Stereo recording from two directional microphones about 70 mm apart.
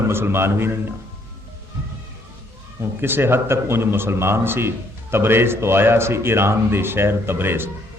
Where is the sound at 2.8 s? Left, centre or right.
Right.